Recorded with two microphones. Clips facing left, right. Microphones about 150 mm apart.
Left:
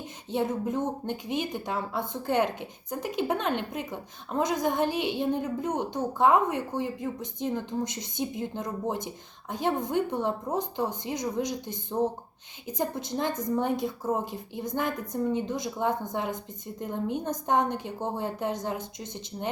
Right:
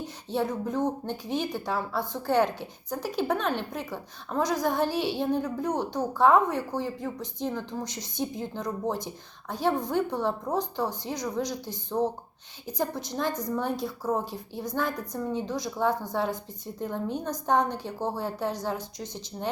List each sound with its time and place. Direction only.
0.3 s a woman's voice: 20° left (ahead or behind)